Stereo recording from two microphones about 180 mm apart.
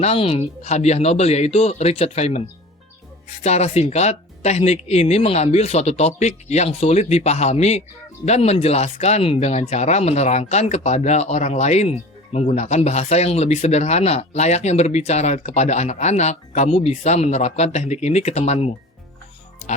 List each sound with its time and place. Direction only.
0.0 s speech: 35° left (ahead or behind)
3.4 s speech: 35° left (ahead or behind)